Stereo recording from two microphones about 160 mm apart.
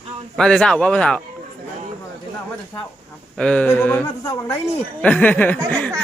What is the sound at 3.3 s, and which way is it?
Speech, 5° left (ahead or behind).